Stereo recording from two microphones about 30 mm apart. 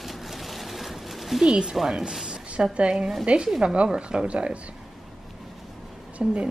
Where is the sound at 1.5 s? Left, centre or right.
Right.